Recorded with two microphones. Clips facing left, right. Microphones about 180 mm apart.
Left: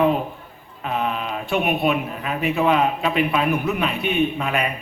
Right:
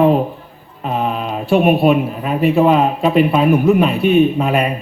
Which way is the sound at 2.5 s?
40° right (ahead or behind).